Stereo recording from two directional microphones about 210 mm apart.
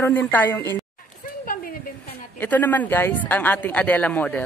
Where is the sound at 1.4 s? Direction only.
40° left (ahead or behind).